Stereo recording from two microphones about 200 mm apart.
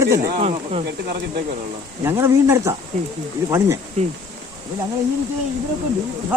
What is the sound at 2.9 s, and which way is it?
Speech, 35° right (ahead or behind).